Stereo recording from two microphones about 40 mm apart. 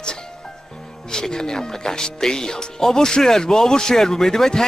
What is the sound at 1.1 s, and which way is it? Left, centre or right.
Speech, centre.